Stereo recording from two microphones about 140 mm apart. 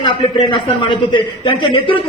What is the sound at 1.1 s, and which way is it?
Speech, 35° left (ahead or behind).